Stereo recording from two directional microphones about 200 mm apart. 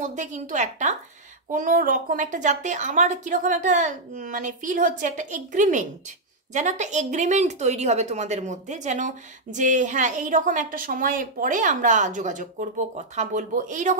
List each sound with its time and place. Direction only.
0.0 s speech: 40° right (ahead or behind)